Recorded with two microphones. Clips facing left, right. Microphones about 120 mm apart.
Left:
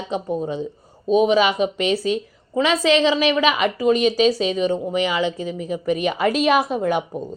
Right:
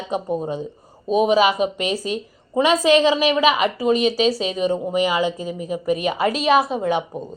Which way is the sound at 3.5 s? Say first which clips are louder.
Even; 5° right (ahead or behind).